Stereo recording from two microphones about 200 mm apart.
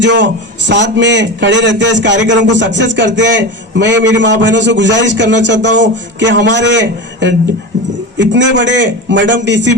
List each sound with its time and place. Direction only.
0.0 s a man's voice: 65° right (ahead or behind)